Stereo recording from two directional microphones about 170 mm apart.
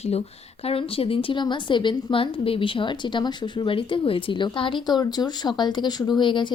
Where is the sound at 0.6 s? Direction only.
35° left (ahead or behind).